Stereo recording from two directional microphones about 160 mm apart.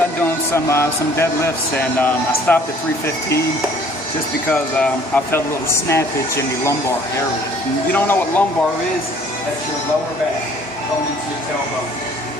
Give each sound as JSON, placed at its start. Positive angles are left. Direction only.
{"t": 0.5, "sound": "speech", "side_deg": 15}
{"t": 4.5, "sound": "speech", "side_deg": 10}
{"t": 7.9, "sound": "speech", "side_deg": 10}